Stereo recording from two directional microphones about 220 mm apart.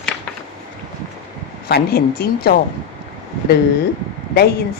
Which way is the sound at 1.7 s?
45° left (ahead or behind).